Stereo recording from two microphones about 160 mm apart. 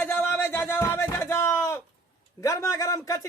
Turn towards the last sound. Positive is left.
turn(degrees=20)  # may be behind; listen again after turning